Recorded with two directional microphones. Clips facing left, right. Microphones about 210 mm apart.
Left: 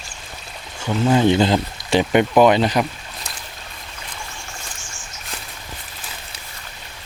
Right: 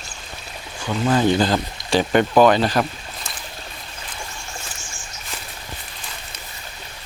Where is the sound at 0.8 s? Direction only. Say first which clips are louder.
Left 2 dB; 15° left (ahead or behind).